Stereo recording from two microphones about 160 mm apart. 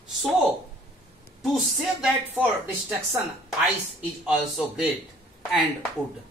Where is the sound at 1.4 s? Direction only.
Centre (ahead or behind).